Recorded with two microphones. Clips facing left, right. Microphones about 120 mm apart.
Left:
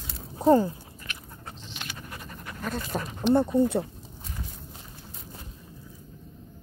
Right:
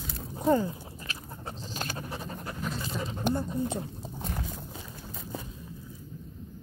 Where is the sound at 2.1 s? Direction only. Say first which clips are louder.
Right 4 dB; 30° right (ahead or behind).